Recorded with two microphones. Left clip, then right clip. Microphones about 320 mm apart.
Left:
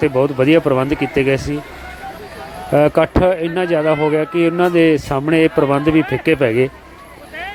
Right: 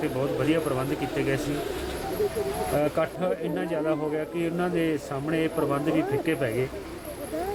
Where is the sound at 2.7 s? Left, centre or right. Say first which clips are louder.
Left 15 dB; left.